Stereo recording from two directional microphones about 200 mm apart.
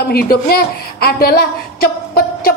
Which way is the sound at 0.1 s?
50° left (ahead or behind).